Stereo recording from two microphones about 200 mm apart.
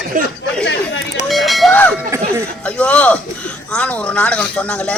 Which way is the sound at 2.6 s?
5° left (ahead or behind).